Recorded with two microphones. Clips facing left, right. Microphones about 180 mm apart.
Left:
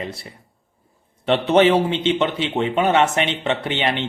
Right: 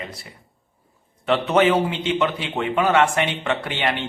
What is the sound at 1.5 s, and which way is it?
Speech, 25° left (ahead or behind).